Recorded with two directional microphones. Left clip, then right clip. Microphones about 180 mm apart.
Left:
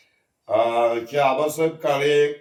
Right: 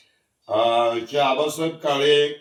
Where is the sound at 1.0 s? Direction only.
15° left (ahead or behind).